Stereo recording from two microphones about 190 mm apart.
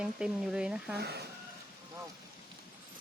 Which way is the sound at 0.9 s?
60° right (ahead or behind).